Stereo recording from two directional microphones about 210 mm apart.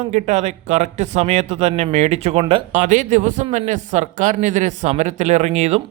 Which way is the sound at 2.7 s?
35° right (ahead or behind).